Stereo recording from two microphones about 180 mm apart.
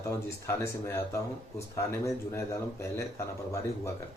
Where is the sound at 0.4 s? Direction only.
15° left (ahead or behind).